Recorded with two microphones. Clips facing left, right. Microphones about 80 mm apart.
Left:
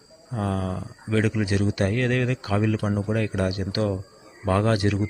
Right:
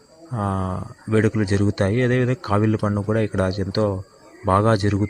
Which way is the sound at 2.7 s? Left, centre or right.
Centre.